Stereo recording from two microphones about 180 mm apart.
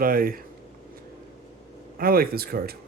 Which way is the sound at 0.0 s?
55° right (ahead or behind).